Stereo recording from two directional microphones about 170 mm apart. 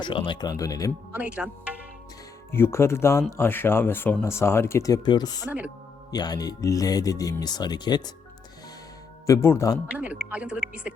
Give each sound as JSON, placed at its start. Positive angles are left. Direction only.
{"t": 0.0, "sound": "speech", "side_deg": 30}
{"t": 1.1, "sound": "speech", "side_deg": -5}
{"t": 2.5, "sound": "speech", "side_deg": 15}
{"t": 5.5, "sound": "speech", "side_deg": -10}
{"t": 6.1, "sound": "speech", "side_deg": 25}
{"t": 9.2, "sound": "speech", "side_deg": 15}
{"t": 9.9, "sound": "speech", "side_deg": -10}